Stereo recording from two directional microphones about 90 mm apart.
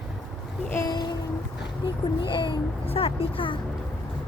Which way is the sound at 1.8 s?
65° left (ahead or behind).